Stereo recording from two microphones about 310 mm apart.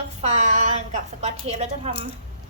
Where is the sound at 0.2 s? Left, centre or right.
Right.